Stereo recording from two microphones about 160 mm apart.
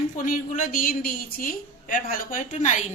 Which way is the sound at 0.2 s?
55° left (ahead or behind).